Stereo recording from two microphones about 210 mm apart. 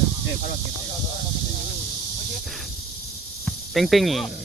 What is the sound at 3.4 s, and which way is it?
Speech, centre (ahead or behind).